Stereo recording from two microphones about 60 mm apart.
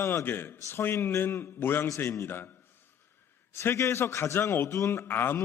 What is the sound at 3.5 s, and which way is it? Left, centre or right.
A man's voice, left.